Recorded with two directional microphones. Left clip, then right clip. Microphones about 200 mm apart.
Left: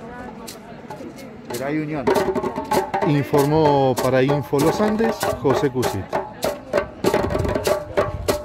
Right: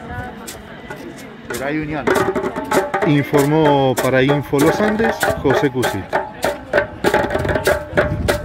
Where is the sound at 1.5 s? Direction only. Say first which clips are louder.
Right 3 dB; 60° left (ahead or behind).